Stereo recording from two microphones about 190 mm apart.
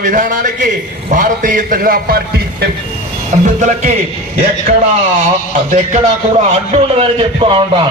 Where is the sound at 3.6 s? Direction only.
40° right (ahead or behind).